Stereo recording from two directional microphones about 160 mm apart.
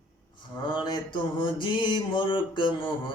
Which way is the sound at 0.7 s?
30° left (ahead or behind).